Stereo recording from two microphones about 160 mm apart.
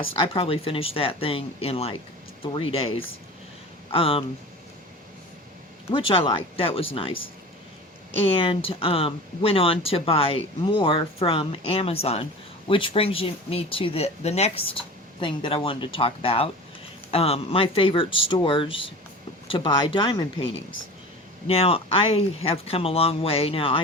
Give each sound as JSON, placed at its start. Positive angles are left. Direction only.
{"t": 0.0, "sound": "speech", "side_deg": 35}
{"t": 3.9, "sound": "speech", "side_deg": 35}
{"t": 5.9, "sound": "speech", "side_deg": 35}
{"t": 8.3, "sound": "speech", "side_deg": 35}